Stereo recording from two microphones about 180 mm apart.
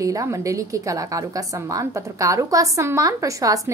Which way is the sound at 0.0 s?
15° right (ahead or behind).